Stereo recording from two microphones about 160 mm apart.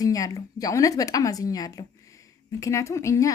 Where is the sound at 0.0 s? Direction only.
20° left (ahead or behind).